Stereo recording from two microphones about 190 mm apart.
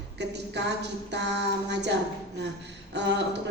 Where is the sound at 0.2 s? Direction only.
65° right (ahead or behind).